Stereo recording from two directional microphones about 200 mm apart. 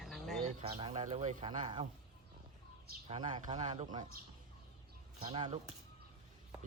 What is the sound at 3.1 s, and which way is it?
Speech, 25° right (ahead or behind).